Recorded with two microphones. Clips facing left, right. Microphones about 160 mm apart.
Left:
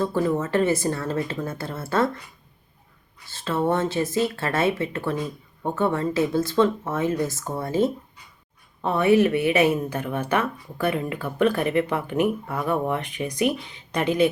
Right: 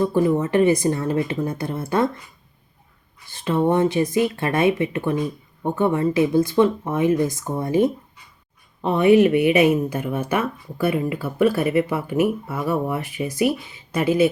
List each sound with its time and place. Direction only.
0.0 s a woman's voice: 15° right (ahead or behind)
3.2 s a woman's voice: 15° right (ahead or behind)